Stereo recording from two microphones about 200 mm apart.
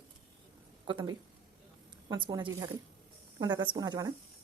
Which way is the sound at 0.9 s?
25° right (ahead or behind).